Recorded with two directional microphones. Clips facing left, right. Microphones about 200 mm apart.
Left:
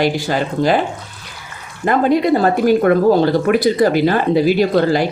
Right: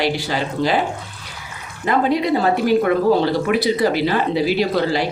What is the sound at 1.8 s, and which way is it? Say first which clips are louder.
Speech: left 4 dB; 50° left (ahead or behind).